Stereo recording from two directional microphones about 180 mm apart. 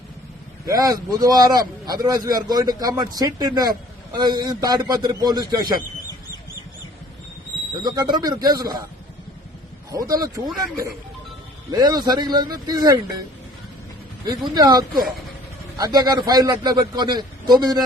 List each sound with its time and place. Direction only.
0.6 s speech: 20° right (ahead or behind)
7.8 s speech: 20° right (ahead or behind)
9.9 s speech: 20° right (ahead or behind)
14.3 s speech: 20° right (ahead or behind)